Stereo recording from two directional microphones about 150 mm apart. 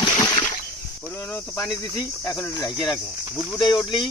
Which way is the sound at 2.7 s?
Centre (ahead or behind).